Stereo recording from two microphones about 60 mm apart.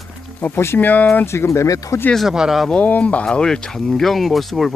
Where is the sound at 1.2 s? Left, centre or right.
Left.